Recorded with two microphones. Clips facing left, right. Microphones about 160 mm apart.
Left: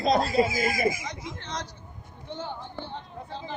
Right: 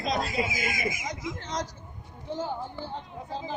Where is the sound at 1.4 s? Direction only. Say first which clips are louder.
Right 3 dB; 45° right (ahead or behind).